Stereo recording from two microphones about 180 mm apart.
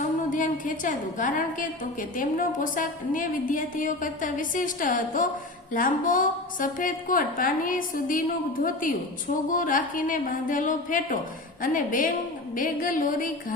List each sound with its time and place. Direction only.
0.0 s a woman's voice: 45° left (ahead or behind)